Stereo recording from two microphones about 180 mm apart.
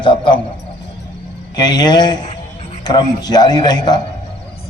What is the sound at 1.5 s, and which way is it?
A man's voice, 25° left (ahead or behind).